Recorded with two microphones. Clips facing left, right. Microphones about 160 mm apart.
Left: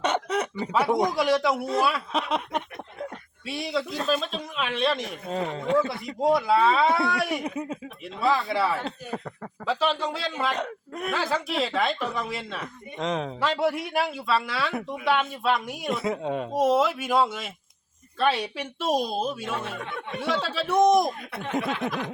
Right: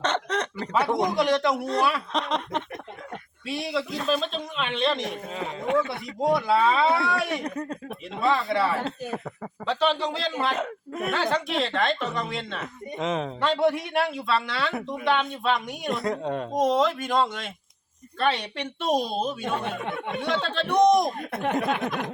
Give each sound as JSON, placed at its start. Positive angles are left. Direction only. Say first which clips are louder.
{"t": 0.0, "sound": "speech", "louder": "left 1 dB", "side_deg": 10}
{"t": 5.3, "sound": "speech", "louder": "left 5 dB", "side_deg": 40}
{"t": 6.2, "sound": "speech", "louder": "left 1 dB", "side_deg": 0}
{"t": 21.2, "sound": "speech", "louder": "right 7 dB", "side_deg": -45}